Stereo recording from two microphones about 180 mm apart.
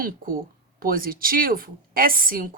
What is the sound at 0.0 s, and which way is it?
Speech, 50° right (ahead or behind).